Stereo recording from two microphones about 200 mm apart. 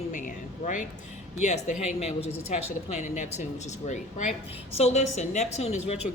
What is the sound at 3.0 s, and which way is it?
A woman's voice, 35° left (ahead or behind).